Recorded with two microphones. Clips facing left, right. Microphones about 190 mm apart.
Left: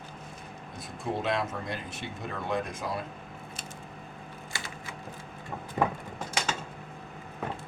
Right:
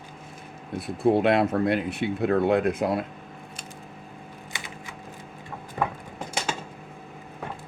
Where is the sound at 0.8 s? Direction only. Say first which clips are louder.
Right 12 dB; 65° right (ahead or behind).